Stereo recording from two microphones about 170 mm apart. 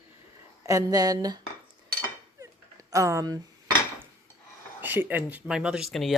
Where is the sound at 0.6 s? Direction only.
20° right (ahead or behind).